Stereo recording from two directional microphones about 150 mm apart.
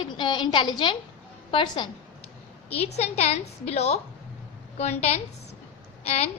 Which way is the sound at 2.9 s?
45° left (ahead or behind).